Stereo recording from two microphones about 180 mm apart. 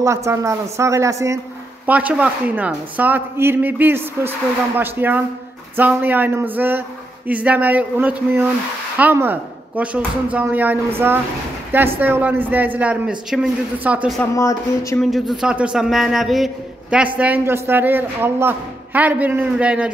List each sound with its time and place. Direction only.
0.0 s speech: 15° right (ahead or behind)
14.3 s speech: 15° left (ahead or behind)
15.0 s a man's voice: centre (ahead or behind)